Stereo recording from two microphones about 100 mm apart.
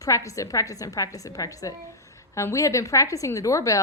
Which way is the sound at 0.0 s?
35° left (ahead or behind).